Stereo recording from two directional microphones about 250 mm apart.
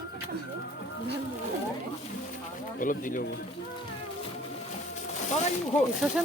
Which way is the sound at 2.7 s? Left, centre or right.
Left.